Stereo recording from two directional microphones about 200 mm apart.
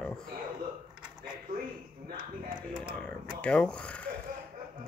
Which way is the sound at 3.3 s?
5° left (ahead or behind).